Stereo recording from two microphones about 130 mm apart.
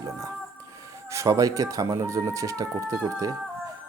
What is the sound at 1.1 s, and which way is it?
Speech, 25° right (ahead or behind).